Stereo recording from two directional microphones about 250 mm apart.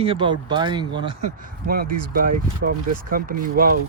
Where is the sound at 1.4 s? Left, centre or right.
Right.